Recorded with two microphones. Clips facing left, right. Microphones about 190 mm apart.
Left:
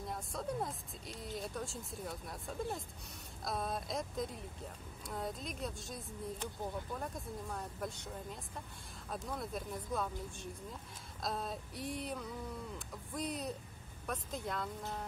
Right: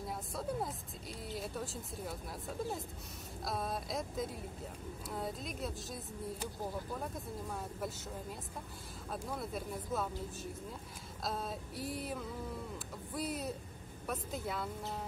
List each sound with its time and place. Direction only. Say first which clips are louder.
0.0 s a woman's voice: right 1 dB; 5° right (ahead or behind)
12.7 s a sound: right 1 dB; 5° right (ahead or behind)
14.0 s speech: right 1 dB; 5° right (ahead or behind)